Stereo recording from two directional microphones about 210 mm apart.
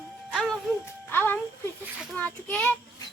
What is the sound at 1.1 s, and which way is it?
Speech, 10° left (ahead or behind).